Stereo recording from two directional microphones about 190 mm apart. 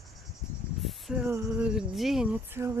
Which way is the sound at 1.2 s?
10° right (ahead or behind).